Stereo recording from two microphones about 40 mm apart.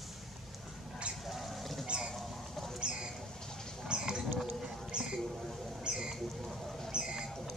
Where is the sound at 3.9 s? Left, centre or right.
Centre.